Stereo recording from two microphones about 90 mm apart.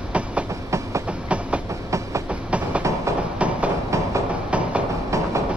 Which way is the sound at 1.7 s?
35° right (ahead or behind).